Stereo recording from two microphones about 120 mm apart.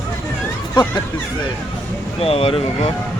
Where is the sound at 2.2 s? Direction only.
55° left (ahead or behind).